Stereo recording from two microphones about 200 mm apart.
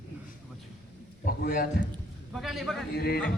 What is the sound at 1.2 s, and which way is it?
Speech, 50° left (ahead or behind).